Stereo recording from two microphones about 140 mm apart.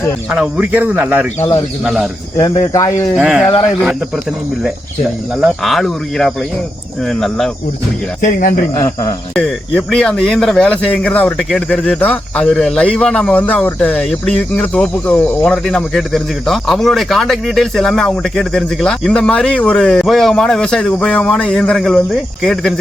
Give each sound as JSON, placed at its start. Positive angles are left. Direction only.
{"t": 0.3, "sound": "speech", "side_deg": -5}
{"t": 3.2, "sound": "speech", "side_deg": -5}
{"t": 5.4, "sound": "speech", "side_deg": 0}
{"t": 8.2, "sound": "speech", "side_deg": 80}
{"t": 8.7, "sound": "speech", "side_deg": 20}
{"t": 9.3, "sound": "speech", "side_deg": 5}
{"t": 15.5, "sound": "speech", "side_deg": 0}